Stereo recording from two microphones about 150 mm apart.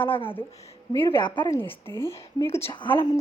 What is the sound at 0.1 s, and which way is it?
Speech, 35° left (ahead or behind).